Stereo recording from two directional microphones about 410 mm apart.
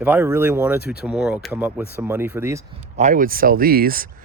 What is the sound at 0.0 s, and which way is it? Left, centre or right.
Speech, centre.